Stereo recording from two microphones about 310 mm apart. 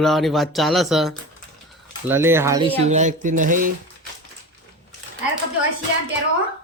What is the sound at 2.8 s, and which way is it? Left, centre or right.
Speech, right.